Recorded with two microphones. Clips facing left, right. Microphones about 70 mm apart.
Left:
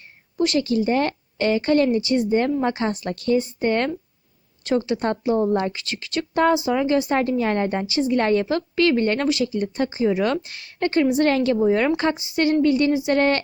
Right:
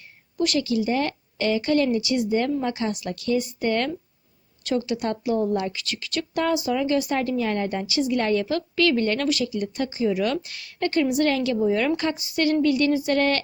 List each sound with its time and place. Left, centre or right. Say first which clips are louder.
0.3 s a woman's voice: left 3 dB; left